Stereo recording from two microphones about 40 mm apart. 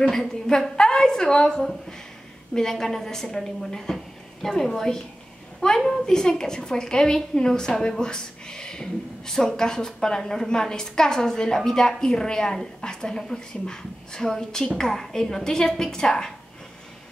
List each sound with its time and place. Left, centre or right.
0.6 s a woman's voice: centre
1.6 s a woman's voice: centre